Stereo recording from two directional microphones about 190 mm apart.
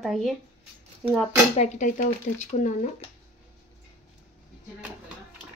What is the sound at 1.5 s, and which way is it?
Speech, 40° left (ahead or behind).